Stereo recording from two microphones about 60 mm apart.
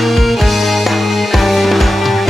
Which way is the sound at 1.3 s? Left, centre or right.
Centre.